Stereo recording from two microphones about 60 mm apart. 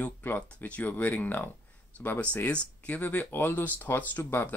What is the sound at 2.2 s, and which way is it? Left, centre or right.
Speech, left.